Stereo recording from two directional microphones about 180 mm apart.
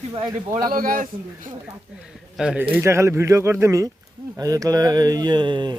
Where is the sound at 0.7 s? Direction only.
50° right (ahead or behind).